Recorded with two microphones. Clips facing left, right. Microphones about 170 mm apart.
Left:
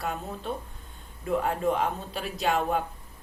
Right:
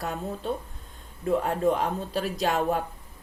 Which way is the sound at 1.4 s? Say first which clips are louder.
Right 2 dB; 40° right (ahead or behind).